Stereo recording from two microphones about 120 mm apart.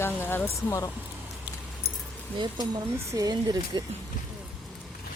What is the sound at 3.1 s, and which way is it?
Speech, 30° right (ahead or behind).